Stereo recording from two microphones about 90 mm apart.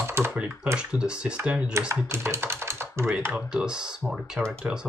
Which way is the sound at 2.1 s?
30° right (ahead or behind).